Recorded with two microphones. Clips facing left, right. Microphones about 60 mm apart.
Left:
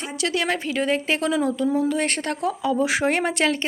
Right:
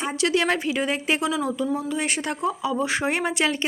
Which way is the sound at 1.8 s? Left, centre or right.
Centre.